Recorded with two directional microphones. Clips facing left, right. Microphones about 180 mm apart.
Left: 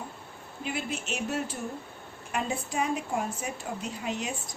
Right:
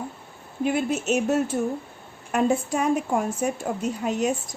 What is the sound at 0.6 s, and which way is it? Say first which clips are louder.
A woman's voice: right 10 dB; 50° right (ahead or behind).